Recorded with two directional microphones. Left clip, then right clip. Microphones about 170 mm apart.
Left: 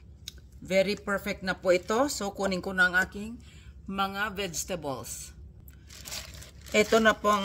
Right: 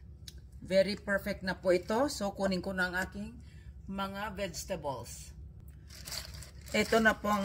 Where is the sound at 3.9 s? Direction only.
50° left (ahead or behind).